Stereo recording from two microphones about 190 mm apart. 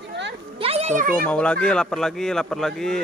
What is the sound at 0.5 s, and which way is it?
Children playing, 30° right (ahead or behind).